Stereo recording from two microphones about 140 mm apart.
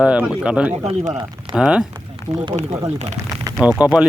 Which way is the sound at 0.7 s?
55° right (ahead or behind).